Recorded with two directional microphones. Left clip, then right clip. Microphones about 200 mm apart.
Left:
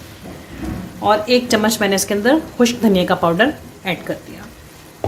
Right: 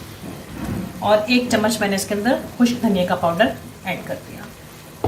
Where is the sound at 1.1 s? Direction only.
55° left (ahead or behind).